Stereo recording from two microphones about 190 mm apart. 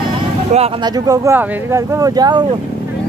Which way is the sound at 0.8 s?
20° right (ahead or behind).